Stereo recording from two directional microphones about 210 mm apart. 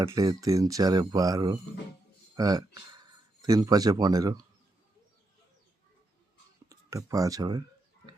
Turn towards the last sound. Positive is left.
turn(degrees=-15)  # may be behind; listen again after turning